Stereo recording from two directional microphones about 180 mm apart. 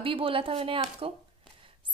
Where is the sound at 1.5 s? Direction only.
30° right (ahead or behind).